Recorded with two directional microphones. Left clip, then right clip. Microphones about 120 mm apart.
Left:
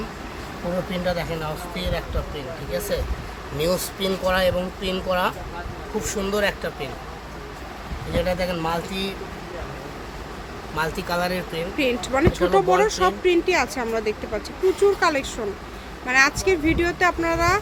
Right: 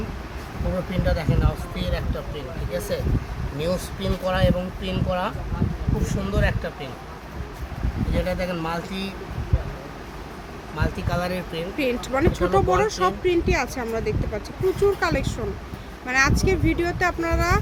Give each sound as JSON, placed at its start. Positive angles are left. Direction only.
{"t": 0.9, "sound": "speech", "side_deg": 0}
{"t": 3.6, "sound": "speech", "side_deg": 40}
{"t": 6.1, "sound": "speech", "side_deg": 50}
{"t": 8.1, "sound": "speech", "side_deg": 15}
{"t": 10.8, "sound": "speech", "side_deg": 60}
{"t": 11.5, "sound": "speech", "side_deg": 0}